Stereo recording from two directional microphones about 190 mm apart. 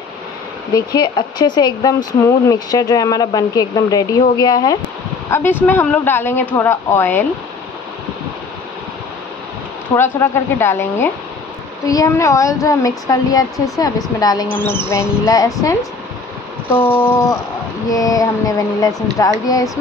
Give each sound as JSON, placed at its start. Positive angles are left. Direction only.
{"t": 0.7, "sound": "speech", "side_deg": 20}
{"t": 9.9, "sound": "speech", "side_deg": 15}
{"t": 17.8, "sound": "speech", "side_deg": 20}